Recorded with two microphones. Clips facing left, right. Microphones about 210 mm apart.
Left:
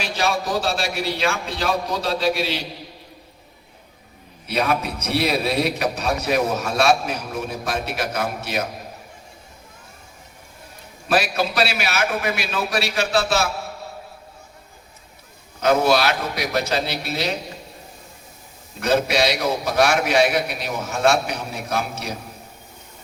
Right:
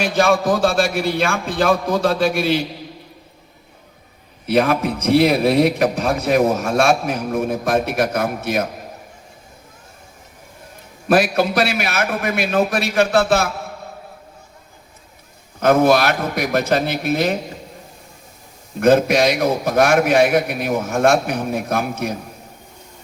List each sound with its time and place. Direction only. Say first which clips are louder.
0.0 s a man's voice: right 7 dB; 50° right (ahead or behind)
4.4 s a man's voice: right 6 dB; 50° right (ahead or behind)
11.1 s a man's voice: right 5 dB; 50° right (ahead or behind)
15.6 s a man's voice: right 4 dB; 55° right (ahead or behind)
18.8 s a man's voice: right 6 dB; 50° right (ahead or behind)